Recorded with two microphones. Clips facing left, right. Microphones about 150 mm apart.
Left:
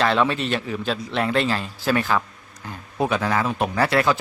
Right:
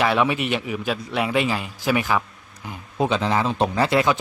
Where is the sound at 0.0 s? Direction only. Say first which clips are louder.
Even; 10° right (ahead or behind).